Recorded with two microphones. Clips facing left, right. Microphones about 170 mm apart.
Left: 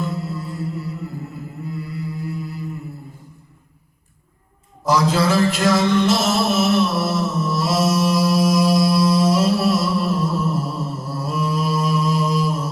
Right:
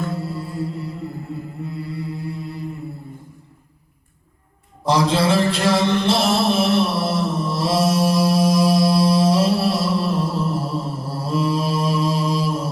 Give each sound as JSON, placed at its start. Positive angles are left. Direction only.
{"t": 0.2, "sound": "music", "side_deg": -30}
{"t": 1.9, "sound": "mantra", "side_deg": -30}
{"t": 4.9, "sound": "a sound", "side_deg": -30}